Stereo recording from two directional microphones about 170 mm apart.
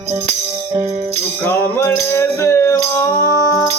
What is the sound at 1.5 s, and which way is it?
Music, 15° left (ahead or behind).